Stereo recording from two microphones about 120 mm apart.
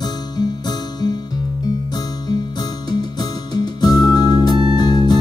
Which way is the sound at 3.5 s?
35° left (ahead or behind).